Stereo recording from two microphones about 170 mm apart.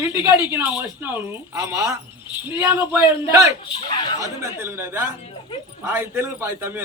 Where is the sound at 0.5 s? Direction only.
15° right (ahead or behind).